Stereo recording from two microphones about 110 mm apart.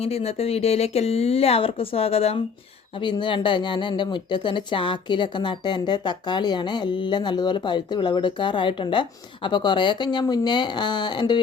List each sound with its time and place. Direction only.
0.0 s speech: 65° left (ahead or behind)
2.9 s speech: 45° left (ahead or behind)